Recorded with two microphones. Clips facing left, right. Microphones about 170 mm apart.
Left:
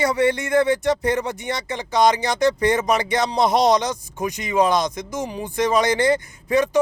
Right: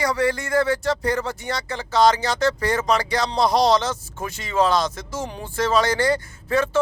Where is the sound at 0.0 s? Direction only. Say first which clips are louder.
Left 3 dB; 20° left (ahead or behind).